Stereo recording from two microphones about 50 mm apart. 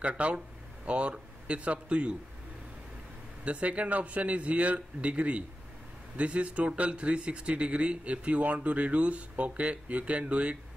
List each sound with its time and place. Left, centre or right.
0.0 s speech: right
3.4 s speech: right